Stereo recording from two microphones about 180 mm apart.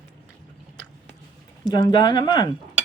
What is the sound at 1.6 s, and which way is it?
Speech, 25° left (ahead or behind).